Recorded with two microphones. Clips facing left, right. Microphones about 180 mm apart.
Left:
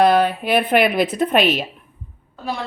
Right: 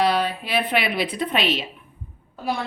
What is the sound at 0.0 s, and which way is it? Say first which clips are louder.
A woman's voice: left 6 dB; 50° left (ahead or behind).